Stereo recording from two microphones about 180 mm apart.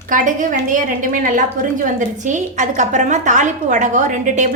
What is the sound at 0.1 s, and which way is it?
Speech, 45° right (ahead or behind).